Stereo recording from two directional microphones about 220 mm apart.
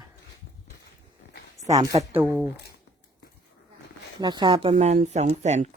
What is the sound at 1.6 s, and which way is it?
Speech, 15° right (ahead or behind).